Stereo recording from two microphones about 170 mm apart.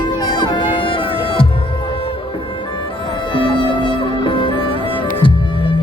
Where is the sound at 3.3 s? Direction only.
30° left (ahead or behind).